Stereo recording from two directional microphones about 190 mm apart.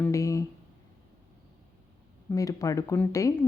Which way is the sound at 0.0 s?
15° left (ahead or behind).